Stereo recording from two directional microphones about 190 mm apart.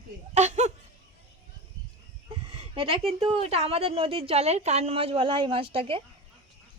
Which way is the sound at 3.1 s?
30° right (ahead or behind).